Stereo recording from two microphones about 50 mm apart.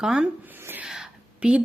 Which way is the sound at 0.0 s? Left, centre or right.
Centre.